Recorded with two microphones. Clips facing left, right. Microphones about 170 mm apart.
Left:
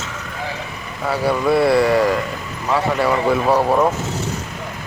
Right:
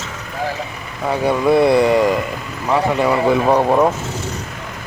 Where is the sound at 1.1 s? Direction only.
20° right (ahead or behind).